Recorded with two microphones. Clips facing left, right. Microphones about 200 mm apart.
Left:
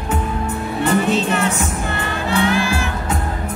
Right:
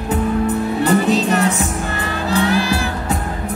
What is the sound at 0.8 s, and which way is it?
Music, 35° right (ahead or behind).